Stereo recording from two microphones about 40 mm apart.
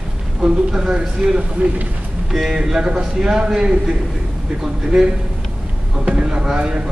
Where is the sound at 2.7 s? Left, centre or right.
Centre.